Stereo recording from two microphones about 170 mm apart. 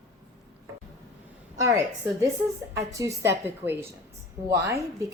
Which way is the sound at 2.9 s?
20° right (ahead or behind).